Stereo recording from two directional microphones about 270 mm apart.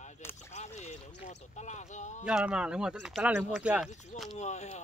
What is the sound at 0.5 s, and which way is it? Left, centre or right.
Speech, left.